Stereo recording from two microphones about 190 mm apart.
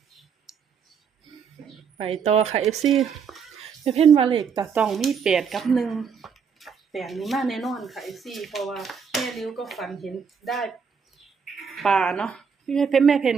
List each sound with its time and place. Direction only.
2.0 s a woman's voice: 35° right (ahead or behind)
2.8 s speech: centre (ahead or behind)
3.8 s a woman's voice: 30° right (ahead or behind)
4.6 s speech: 5° right (ahead or behind)